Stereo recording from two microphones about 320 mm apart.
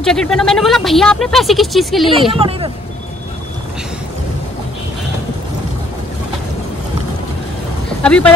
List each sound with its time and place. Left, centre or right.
0.0 s speech: centre
2.3 s speech: centre
8.0 s speech: centre